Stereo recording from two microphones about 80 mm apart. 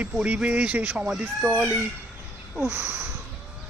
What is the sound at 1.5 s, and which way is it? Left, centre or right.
Speech, right.